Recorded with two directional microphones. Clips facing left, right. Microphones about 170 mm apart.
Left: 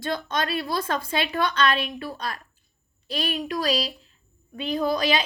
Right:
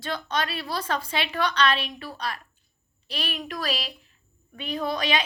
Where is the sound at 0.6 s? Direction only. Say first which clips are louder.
Left 2 dB; 45° left (ahead or behind).